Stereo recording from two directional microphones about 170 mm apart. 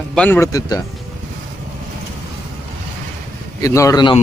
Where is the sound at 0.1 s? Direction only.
5° left (ahead or behind).